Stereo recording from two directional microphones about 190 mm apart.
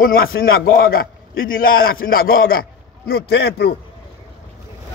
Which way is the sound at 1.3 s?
90° left.